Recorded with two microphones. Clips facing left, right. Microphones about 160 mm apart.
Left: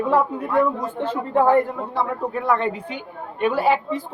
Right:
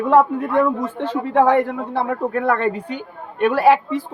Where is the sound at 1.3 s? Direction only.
80° right; by 3.0 s 50° right (ahead or behind).